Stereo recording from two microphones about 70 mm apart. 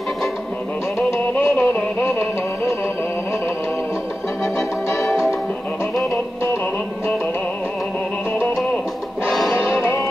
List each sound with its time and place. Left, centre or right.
1.6 s music: left
9.6 s music: centre